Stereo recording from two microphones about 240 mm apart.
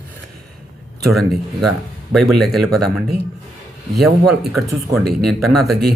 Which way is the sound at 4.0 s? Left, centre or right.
Centre.